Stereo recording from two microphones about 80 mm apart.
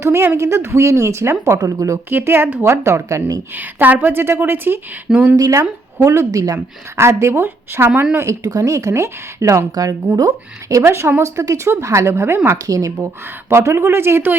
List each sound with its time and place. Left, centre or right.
0.0 s speech: right
1.5 s speech: right
2.0 s speech: right
3.5 s a woman's voice: right
5.0 s speech: centre
5.4 s speech: right
6.9 s speech: right
12.5 s speech: right
13.5 s speech: right